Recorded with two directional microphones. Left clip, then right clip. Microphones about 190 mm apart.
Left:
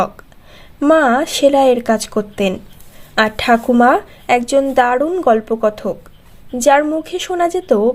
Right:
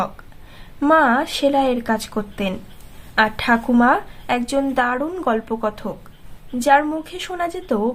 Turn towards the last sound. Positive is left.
turn(degrees=30)  # may be behind; listen again after turning